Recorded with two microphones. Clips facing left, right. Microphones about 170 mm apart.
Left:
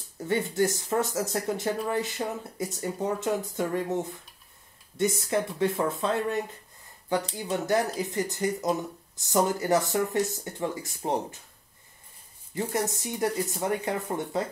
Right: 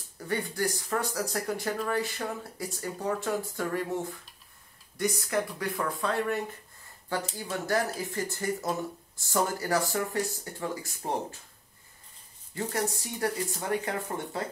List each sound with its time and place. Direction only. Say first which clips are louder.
0.3 s speech: left 5 dB; 25° left (ahead or behind)
12.5 s speech: left 2 dB; 20° left (ahead or behind)